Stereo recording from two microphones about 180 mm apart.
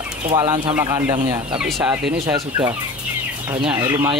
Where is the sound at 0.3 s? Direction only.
25° right (ahead or behind).